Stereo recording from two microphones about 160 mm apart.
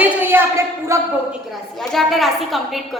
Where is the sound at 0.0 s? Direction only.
15° right (ahead or behind).